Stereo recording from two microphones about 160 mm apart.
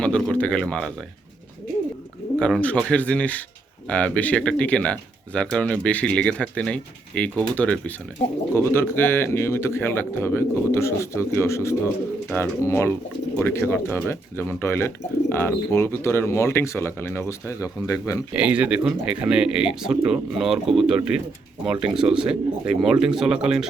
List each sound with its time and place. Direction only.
0.0 s speech: 5° left (ahead or behind)
2.4 s speech: 5° left (ahead or behind)
18.3 s speech: 10° right (ahead or behind)